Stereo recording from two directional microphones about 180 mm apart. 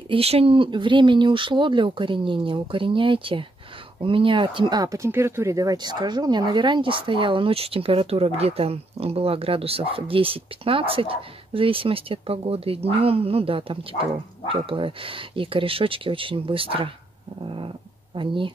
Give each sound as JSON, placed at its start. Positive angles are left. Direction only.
{"t": 0.1, "sound": "speech", "side_deg": -30}
{"t": 18.1, "sound": "speech", "side_deg": -30}